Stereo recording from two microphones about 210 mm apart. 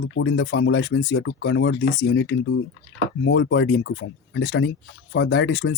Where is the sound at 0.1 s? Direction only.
60° left (ahead or behind).